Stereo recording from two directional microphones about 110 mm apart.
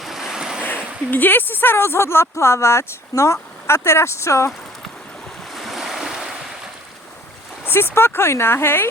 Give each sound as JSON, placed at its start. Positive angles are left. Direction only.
{"t": 0.0, "sound": "waves", "side_deg": -5}
{"t": 1.1, "sound": "speech", "side_deg": 15}
{"t": 5.5, "sound": "waves", "side_deg": 0}
{"t": 7.7, "sound": "speech", "side_deg": 20}